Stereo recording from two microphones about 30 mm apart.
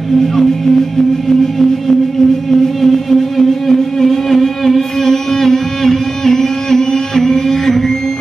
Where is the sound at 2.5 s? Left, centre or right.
Centre.